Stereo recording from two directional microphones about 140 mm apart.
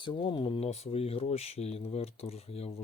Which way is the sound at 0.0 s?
35° left (ahead or behind).